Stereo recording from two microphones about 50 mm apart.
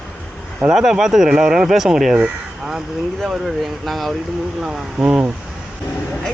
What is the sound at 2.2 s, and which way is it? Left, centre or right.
Crow, centre.